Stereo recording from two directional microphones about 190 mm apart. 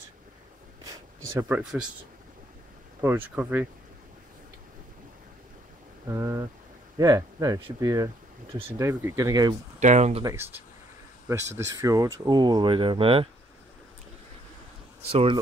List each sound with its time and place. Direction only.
0.8 s speech: 15° right (ahead or behind)
3.0 s speech: 10° right (ahead or behind)
6.0 s speech: 15° right (ahead or behind)
8.7 s speech: 15° right (ahead or behind)
9.8 s speech: 40° right (ahead or behind)
10.2 s speech: 10° right (ahead or behind); by 13.3 s 30° right (ahead or behind)
15.0 s speech: 30° right (ahead or behind)